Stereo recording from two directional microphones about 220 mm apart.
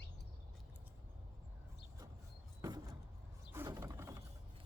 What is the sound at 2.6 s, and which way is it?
Door, 15° right (ahead or behind).